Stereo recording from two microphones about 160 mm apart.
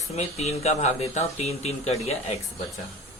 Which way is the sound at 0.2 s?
40° left (ahead or behind).